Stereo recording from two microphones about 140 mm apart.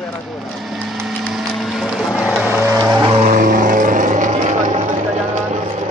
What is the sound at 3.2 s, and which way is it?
Vehicle, 70° right (ahead or behind).